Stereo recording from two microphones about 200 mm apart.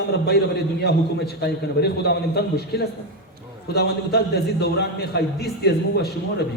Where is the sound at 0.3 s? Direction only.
55° left (ahead or behind).